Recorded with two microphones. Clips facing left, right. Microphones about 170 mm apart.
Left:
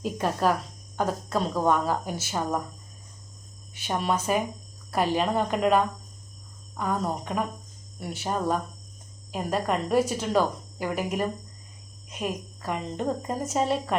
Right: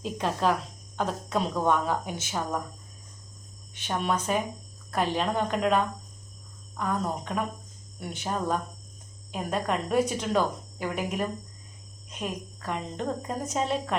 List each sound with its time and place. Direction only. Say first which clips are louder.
0.0 s speech: left 2 dB; 5° left (ahead or behind)
3.8 s speech: left 1 dB; 10° left (ahead or behind)